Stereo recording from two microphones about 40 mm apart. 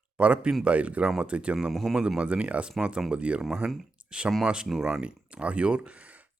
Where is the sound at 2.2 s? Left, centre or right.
Right.